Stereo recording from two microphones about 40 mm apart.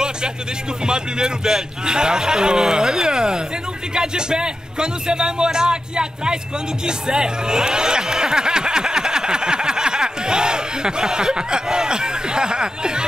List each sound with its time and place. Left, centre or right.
0.8 s a man's voice: right
6.9 s music: centre